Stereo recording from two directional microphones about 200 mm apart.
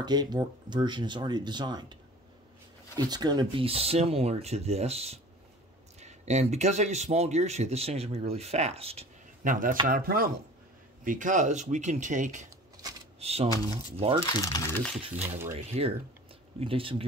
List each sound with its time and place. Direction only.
0.0 s speech: 20° right (ahead or behind)
3.0 s speech: 20° right (ahead or behind); by 9.8 s 40° right (ahead or behind)
9.8 s chopping: 45° right (ahead or behind)
11.1 s speech: 40° right (ahead or behind)
12.4 s a sound: 20° right (ahead or behind)
13.2 s speech: 30° right (ahead or behind)
14.2 s speech: 20° left (ahead or behind)
15.1 s speech: 10° right (ahead or behind)
15.5 s speech: 30° right (ahead or behind)